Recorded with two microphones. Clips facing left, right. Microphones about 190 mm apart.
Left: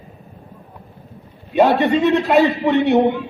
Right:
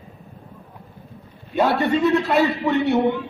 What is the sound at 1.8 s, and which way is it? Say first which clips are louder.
A woman's voice: left 3 dB; 20° left (ahead or behind).